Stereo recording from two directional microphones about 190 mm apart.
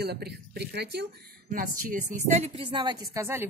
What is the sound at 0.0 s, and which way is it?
Speech, 60° right (ahead or behind).